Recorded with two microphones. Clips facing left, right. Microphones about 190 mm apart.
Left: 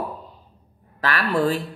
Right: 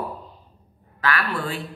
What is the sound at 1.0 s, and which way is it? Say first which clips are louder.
Speech: left 4 dB; 40° left (ahead or behind).